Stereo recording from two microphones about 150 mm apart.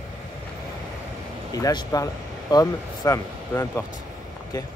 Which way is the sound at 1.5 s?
25° left (ahead or behind).